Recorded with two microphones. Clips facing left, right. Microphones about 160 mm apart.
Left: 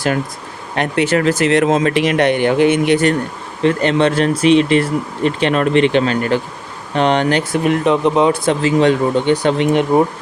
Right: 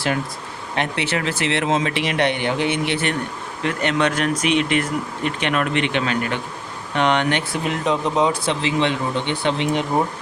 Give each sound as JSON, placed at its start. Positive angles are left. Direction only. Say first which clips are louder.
{"t": 0.8, "sound": "speech", "louder": "left 8 dB", "side_deg": 45}
{"t": 3.6, "sound": "speech", "louder": "left 7 dB", "side_deg": 30}
{"t": 7.6, "sound": "speech", "louder": "left 9 dB", "side_deg": 60}